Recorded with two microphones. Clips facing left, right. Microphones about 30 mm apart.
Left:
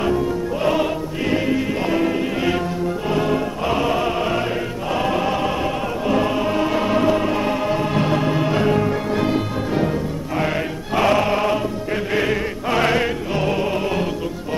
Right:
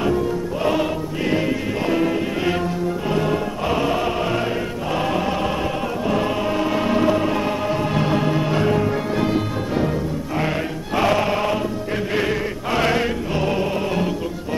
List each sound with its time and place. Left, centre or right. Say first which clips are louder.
1.9 s music: right 2 dB; centre
11.0 s choir: left 2 dB; centre
12.1 s chant: left 2 dB; centre
12.8 s music: left 1 dB; centre